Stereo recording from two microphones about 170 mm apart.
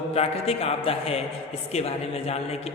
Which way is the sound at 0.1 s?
35° left (ahead or behind).